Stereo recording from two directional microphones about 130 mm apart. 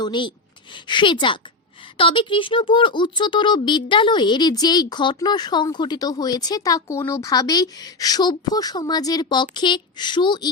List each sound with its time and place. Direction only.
0.0 s a woman's voice: 35° left (ahead or behind)